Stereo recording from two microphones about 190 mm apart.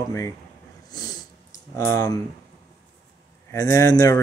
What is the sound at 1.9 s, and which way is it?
Speech, 20° left (ahead or behind).